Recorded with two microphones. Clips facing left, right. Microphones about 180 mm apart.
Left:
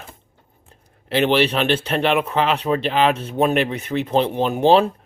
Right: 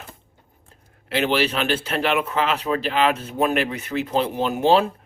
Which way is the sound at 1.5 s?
30° left (ahead or behind).